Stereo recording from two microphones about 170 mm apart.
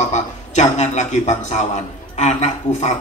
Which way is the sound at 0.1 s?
45° left (ahead or behind).